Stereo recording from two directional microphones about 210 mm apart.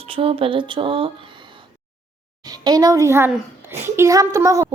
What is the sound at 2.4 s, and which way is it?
A child's voice, 20° right (ahead or behind).